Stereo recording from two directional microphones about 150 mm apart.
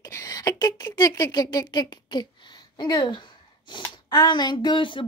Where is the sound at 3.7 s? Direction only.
30° left (ahead or behind).